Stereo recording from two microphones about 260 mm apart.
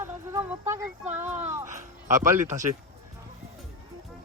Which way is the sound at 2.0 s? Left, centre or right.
Right.